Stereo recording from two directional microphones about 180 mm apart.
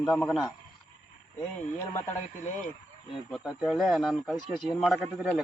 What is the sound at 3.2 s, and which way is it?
A man's voice, centre (ahead or behind).